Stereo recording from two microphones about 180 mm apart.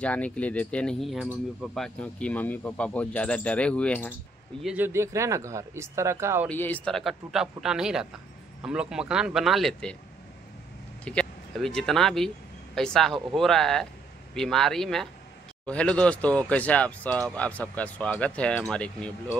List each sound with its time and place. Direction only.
0.0 s speech: 5° left (ahead or behind)
4.6 s speech: 10° right (ahead or behind)
6.5 s speech: 10° left (ahead or behind)
11.1 s speech: 5° left (ahead or behind)